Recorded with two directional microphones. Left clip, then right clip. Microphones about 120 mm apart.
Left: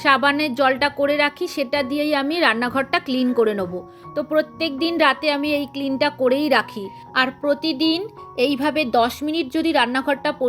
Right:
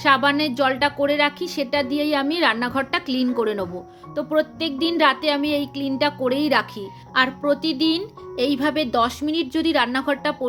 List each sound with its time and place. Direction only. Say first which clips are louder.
0.0 s a woman's voice: left 1 dB; 35° left (ahead or behind)